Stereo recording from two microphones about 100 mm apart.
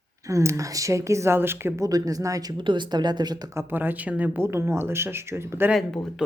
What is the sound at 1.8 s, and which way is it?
Speech, 35° right (ahead or behind).